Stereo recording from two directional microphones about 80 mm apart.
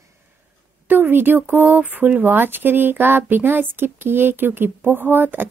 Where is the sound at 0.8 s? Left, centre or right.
Right.